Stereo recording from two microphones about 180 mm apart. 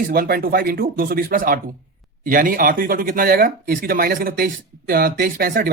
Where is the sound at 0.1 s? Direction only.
55° right (ahead or behind).